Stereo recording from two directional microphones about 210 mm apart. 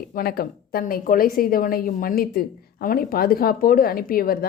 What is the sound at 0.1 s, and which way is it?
A woman's voice, 45° left (ahead or behind).